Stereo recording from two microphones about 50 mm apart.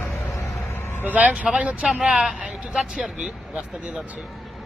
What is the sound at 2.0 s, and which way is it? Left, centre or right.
Speech, centre.